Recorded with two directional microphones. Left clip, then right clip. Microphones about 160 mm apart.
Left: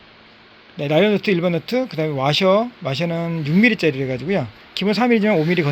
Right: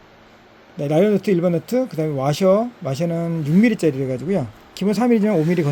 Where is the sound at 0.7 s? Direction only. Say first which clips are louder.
Left 1 dB; 10° right (ahead or behind).